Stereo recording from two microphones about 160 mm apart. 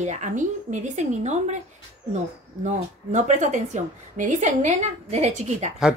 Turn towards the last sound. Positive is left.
turn(degrees=-45)  # may be behind; listen again after turning